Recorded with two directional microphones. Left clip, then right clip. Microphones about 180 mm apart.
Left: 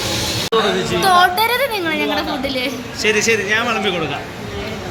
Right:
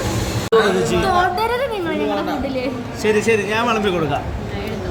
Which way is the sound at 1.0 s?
30° left (ahead or behind).